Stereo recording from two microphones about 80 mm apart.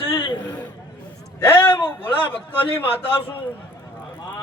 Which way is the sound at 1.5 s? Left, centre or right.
Left.